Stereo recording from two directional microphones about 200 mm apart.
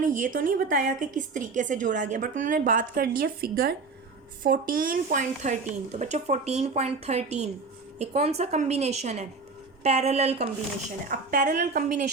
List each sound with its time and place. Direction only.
0.0 s a woman's voice: 40° right (ahead or behind)